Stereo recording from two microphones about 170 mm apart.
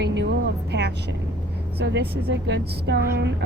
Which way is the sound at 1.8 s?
90° right.